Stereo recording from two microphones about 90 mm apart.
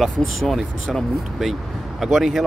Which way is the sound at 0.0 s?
5° left (ahead or behind).